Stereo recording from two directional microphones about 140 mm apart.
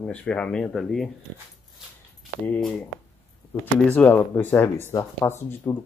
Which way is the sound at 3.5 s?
10° left (ahead or behind).